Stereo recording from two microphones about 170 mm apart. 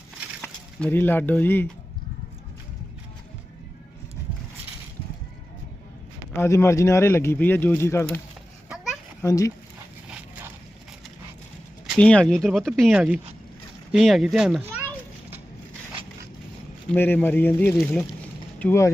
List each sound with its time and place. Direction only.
0.4 s speech: 10° left (ahead or behind)
6.3 s speech: 15° left (ahead or behind)
8.7 s a sound: 5° right (ahead or behind)
9.2 s speech: 20° left (ahead or behind)
10.1 s a sound: 5° right (ahead or behind)
11.9 s speech: 5° left (ahead or behind)
16.9 s speech: 10° left (ahead or behind)